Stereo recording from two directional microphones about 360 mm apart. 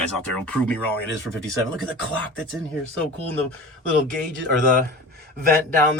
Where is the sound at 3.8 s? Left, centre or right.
Centre.